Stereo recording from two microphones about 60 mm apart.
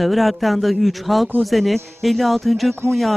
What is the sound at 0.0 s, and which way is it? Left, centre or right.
Speech, centre.